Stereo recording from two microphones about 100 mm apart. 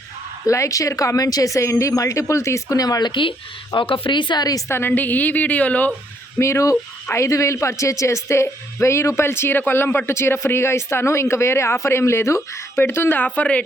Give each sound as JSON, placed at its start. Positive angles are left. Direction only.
{"t": 0.4, "sound": "speech", "side_deg": 30}
{"t": 4.7, "sound": "a woman's voice", "side_deg": 20}
{"t": 6.4, "sound": "speech", "side_deg": 30}